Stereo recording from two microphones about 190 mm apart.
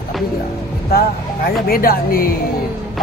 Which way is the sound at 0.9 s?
55° left (ahead or behind).